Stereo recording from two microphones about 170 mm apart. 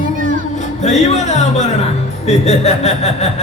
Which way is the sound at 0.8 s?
40° left (ahead or behind).